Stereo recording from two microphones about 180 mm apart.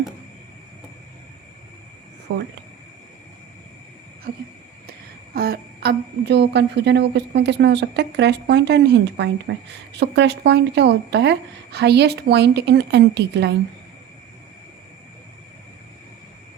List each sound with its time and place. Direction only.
2.3 s a woman's voice: 70° right (ahead or behind)
4.3 s a woman's voice: 60° right (ahead or behind)